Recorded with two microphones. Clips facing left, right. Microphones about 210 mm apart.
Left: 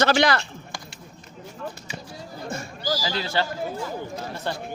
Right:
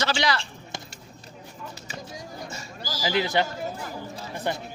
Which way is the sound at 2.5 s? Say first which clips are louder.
Left 8 dB; 55° left (ahead or behind).